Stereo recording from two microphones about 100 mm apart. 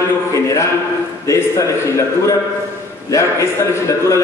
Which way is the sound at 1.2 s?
30° left (ahead or behind).